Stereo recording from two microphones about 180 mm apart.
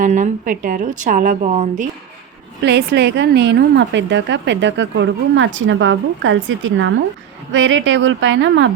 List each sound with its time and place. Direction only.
0.0 s a woman's voice: 45° right (ahead or behind)
2.6 s a woman's voice: 70° right (ahead or behind); by 8.7 s 85° right